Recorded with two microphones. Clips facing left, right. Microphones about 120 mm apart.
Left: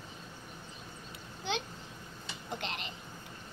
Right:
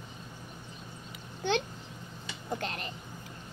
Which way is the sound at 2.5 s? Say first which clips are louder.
Right 4 dB; 45° right (ahead or behind).